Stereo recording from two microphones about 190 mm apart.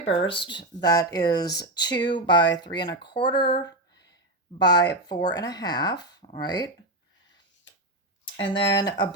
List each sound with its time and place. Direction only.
0.0 s speech: 30° left (ahead or behind)
8.5 s speech: 25° left (ahead or behind)